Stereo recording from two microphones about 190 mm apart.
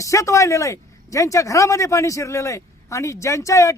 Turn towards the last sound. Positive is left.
turn(degrees=15)  # may be behind; listen again after turning